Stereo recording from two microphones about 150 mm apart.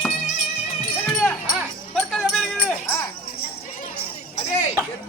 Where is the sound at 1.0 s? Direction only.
5° left (ahead or behind).